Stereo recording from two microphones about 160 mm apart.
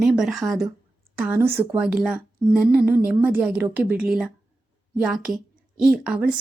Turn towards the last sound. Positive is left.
turn(degrees=-5)  # may be behind; listen again after turning